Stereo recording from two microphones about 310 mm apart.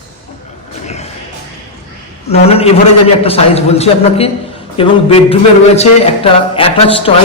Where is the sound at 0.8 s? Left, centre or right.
Left.